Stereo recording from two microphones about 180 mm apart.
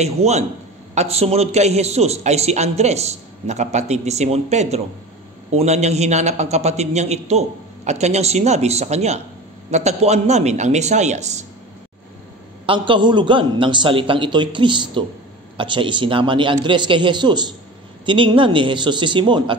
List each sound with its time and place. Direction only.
0.0 s a man's voice: 35° right (ahead or behind)
12.6 s a man's voice: 30° right (ahead or behind)